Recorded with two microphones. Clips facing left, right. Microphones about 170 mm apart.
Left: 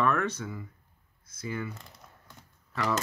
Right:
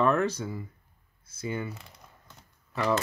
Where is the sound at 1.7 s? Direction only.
Centre (ahead or behind).